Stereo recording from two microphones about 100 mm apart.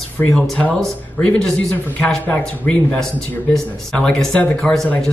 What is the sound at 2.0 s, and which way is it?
Speech, 15° left (ahead or behind).